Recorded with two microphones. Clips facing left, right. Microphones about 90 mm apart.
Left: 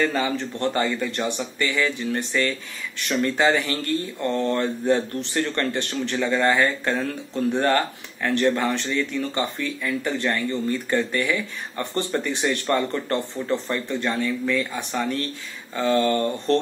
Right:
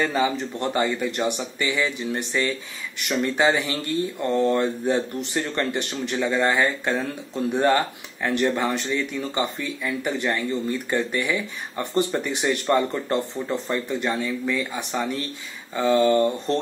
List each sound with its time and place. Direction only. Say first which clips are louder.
0.0 s speech: even; 15° right (ahead or behind)